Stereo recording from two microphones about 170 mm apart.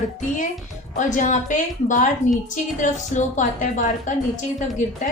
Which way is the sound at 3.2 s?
45° left (ahead or behind).